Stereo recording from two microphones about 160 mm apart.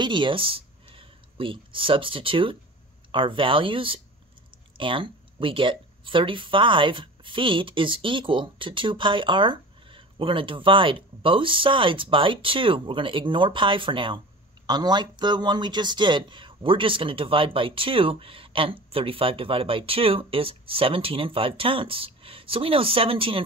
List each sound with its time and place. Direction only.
0.0 s speech: 30° right (ahead or behind)